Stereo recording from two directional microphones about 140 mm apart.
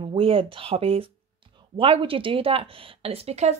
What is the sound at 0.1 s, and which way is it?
A woman's voice, 40° right (ahead or behind).